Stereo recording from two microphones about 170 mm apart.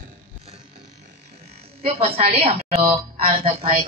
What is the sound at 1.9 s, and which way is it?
Speech, 35° right (ahead or behind).